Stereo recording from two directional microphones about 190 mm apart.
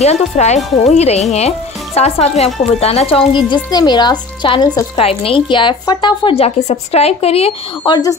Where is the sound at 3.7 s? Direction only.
20° left (ahead or behind).